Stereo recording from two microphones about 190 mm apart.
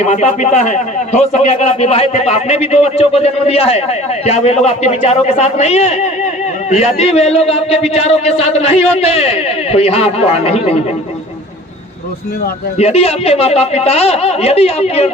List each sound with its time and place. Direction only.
0.0 s a man's voice: 35° left (ahead or behind)
12.7 s a man's voice: 35° left (ahead or behind)